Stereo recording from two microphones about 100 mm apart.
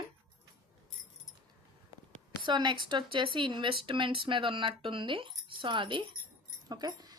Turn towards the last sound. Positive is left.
turn(degrees=-40)  # may be behind; listen again after turning